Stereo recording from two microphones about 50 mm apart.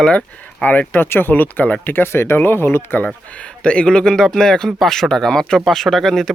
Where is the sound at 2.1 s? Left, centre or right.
Left.